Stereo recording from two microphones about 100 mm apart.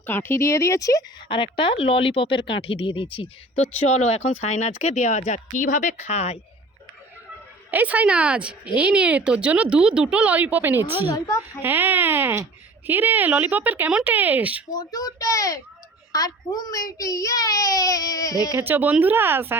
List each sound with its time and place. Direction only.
0.0 s speech: 20° left (ahead or behind)
1.3 s speech: 60° left (ahead or behind)
3.9 s speech: 90° left
7.7 s speech: 15° right (ahead or behind)
14.7 s a child's voice: 40° left (ahead or behind)
18.7 s speech: 15° right (ahead or behind)